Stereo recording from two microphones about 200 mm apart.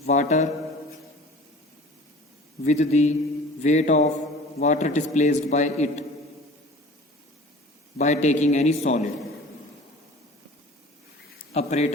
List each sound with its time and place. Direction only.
0.1 s a man's voice: 35° left (ahead or behind)
2.6 s a man's voice: 35° left (ahead or behind)
7.9 s a man's voice: 35° left (ahead or behind)
11.5 s a man's voice: 35° left (ahead or behind)